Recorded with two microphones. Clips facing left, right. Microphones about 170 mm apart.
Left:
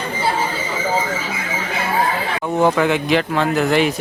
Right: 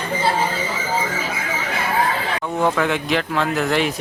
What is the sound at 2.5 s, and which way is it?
Speech, 20° left (ahead or behind).